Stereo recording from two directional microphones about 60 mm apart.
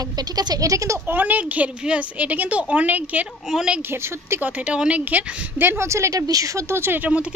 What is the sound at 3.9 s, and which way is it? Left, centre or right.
Speech, right.